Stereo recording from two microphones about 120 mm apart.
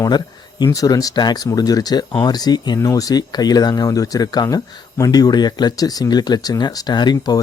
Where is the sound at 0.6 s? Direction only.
30° left (ahead or behind).